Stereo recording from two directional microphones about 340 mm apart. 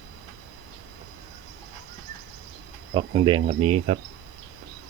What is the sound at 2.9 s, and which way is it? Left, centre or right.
Speech, centre.